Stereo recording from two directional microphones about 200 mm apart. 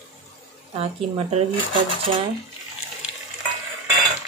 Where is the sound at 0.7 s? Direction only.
30° right (ahead or behind).